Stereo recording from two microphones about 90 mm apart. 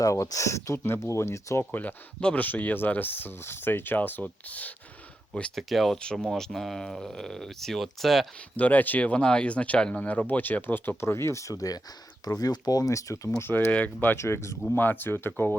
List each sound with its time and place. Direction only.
0.0 s speech: 40° left (ahead or behind)
1.7 s speech: 20° left (ahead or behind)
5.3 s speech: 5° left (ahead or behind)
8.5 s speech: 15° left (ahead or behind)
13.7 s speech: 15° left (ahead or behind)